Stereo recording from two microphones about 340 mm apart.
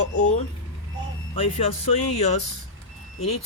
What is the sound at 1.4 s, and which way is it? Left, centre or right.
Speech, centre.